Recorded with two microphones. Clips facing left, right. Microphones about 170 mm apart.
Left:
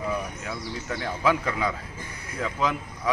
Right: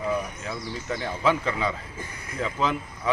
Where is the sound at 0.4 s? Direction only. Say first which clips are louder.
Right 1 dB; 5° left (ahead or behind).